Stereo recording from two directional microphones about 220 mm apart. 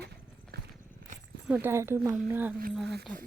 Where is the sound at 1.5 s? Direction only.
10° right (ahead or behind).